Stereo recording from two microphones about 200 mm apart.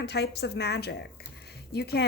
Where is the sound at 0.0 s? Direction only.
55° left (ahead or behind).